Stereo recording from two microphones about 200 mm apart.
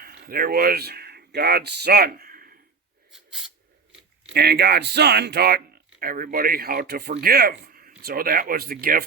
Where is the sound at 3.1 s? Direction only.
Centre (ahead or behind).